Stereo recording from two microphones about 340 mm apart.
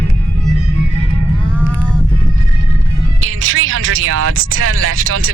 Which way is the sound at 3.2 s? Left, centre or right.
Right.